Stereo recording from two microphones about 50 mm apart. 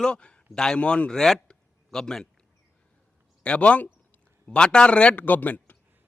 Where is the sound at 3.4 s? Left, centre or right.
Left.